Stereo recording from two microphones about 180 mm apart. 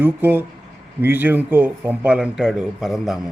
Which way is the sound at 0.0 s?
10° right (ahead or behind).